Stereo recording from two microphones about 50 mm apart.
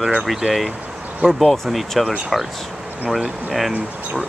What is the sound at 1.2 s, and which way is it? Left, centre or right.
Speech, centre.